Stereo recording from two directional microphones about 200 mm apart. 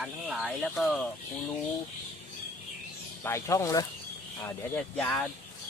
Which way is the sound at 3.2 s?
15° left (ahead or behind).